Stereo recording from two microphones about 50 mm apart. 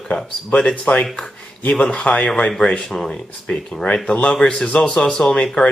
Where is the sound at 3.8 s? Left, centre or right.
Left.